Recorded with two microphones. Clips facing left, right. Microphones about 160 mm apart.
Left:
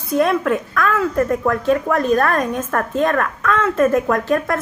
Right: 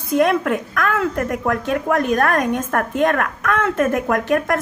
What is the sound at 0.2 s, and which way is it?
A woman's voice, 55° right (ahead or behind).